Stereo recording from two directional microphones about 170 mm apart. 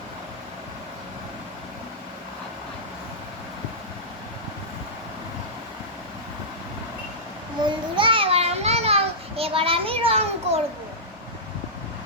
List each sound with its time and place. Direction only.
7.6 s children playing: 30° right (ahead or behind)